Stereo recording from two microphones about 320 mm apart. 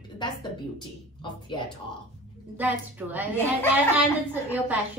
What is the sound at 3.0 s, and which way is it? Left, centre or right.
Speech, centre.